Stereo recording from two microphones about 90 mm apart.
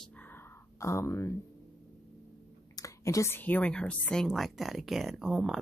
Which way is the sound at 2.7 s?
35° left (ahead or behind).